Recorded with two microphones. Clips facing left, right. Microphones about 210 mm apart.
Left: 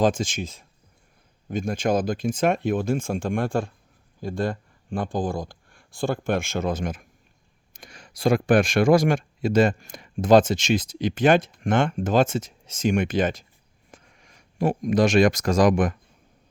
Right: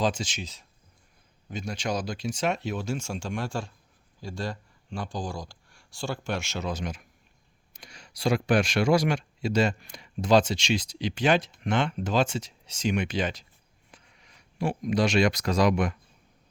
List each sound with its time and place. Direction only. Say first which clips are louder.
0.0 s speech: left 6 dB; 50° left (ahead or behind)